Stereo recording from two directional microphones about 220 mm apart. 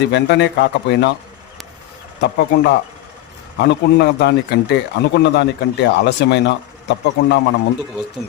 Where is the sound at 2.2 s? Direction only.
50° left (ahead or behind).